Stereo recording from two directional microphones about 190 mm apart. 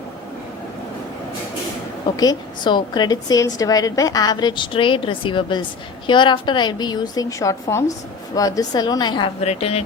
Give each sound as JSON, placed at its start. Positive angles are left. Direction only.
{"t": 2.1, "sound": "a woman's voice", "side_deg": 20}